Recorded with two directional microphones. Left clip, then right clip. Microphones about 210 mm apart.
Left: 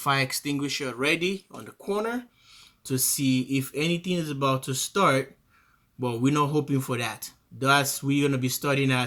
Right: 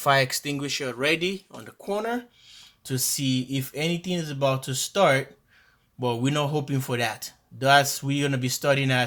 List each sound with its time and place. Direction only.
0.0 s speech: 30° right (ahead or behind)